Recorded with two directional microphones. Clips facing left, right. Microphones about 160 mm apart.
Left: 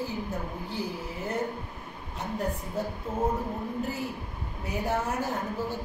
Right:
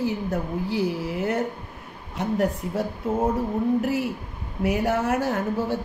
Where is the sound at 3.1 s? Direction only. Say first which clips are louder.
Right 8 dB; 90° right.